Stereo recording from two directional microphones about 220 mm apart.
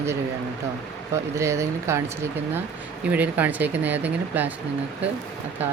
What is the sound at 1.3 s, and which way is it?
Speech, 15° right (ahead or behind).